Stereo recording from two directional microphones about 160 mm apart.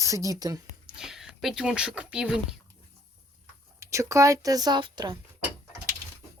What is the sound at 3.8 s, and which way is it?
A woman's voice, 20° right (ahead or behind).